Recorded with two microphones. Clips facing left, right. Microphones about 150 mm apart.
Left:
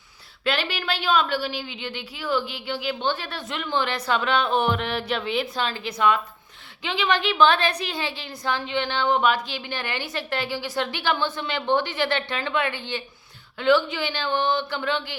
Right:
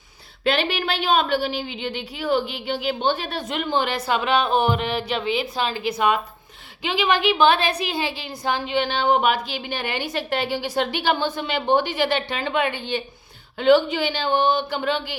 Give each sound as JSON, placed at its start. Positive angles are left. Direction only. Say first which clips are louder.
{"t": 0.5, "sound": "a woman's voice", "louder": "right 4 dB", "side_deg": -20}